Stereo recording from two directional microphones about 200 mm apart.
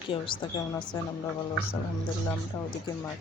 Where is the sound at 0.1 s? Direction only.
25° left (ahead or behind).